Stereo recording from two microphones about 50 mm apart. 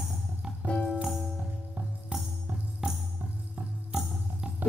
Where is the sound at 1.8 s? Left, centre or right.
Right.